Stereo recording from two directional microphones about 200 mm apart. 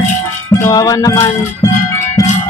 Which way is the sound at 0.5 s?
15° left (ahead or behind).